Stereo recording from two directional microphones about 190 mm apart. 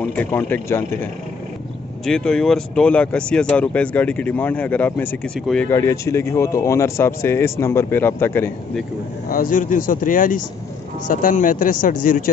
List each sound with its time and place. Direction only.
0.0 s speech: 10° left (ahead or behind)
2.0 s speech: 5° left (ahead or behind)
5.8 s speech: 15° left (ahead or behind)
9.3 s speech: 45° left (ahead or behind)